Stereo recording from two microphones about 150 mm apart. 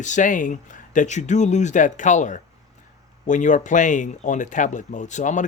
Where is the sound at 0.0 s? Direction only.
55° left (ahead or behind).